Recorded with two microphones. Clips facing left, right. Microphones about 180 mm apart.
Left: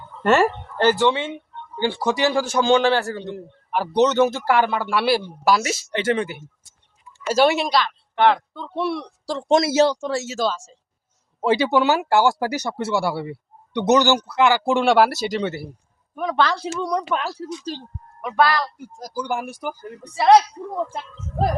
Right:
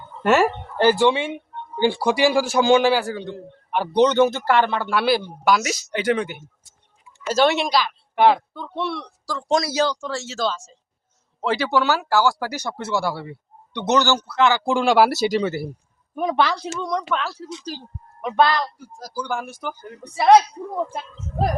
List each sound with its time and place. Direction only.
0.2 s a man's voice: 5° right (ahead or behind)
8.8 s speech: 10° left (ahead or behind)
9.2 s speech: 25° left (ahead or behind)
14.7 s a man's voice: centre (ahead or behind)
16.1 s a man's voice: 15° right (ahead or behind)
16.5 s speech: 5° left (ahead or behind)
17.6 s a man's voice: centre (ahead or behind)
18.2 s a man's voice: 20° right (ahead or behind)
18.8 s speech: 20° left (ahead or behind)
20.1 s a man's voice: 5° right (ahead or behind)